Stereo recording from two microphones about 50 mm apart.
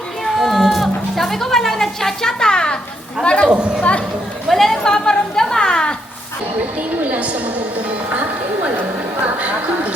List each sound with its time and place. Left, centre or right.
0.3 s livestock: centre
3.2 s speech: left
3.5 s speech: centre
4.4 s a sound: centre
7.0 s music: right
9.2 s a sound: right